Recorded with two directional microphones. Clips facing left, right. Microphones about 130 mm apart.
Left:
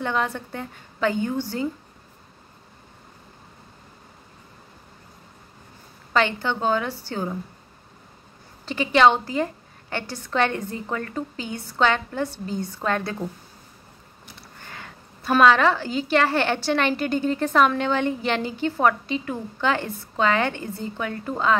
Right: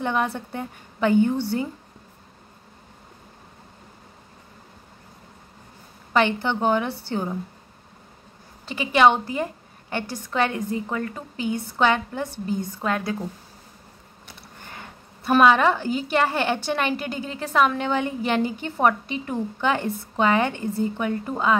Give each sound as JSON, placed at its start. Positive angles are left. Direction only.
{"t": 0.0, "sound": "a woman's voice", "side_deg": -15}
{"t": 6.1, "sound": "a woman's voice", "side_deg": -15}
{"t": 8.6, "sound": "a woman's voice", "side_deg": -10}
{"t": 14.8, "sound": "a woman's voice", "side_deg": -15}